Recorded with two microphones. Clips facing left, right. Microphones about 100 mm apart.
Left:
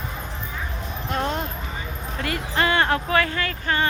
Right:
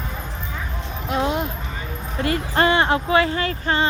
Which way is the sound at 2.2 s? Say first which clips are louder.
Right 4 dB; 30° right (ahead or behind).